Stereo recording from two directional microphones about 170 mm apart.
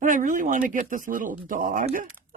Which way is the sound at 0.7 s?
50° right (ahead or behind).